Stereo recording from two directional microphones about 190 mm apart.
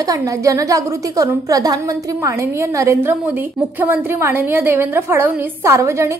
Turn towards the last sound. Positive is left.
turn(degrees=-15)  # may be behind; listen again after turning